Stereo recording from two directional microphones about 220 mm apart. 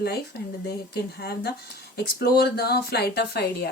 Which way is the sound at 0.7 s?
45° left (ahead or behind).